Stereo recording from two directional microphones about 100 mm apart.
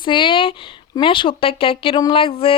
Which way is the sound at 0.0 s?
55° left (ahead or behind).